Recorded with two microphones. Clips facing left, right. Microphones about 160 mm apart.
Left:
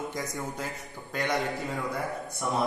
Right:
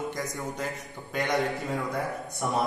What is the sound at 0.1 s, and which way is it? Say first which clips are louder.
Speech: right 1 dB; 20° left (ahead or behind).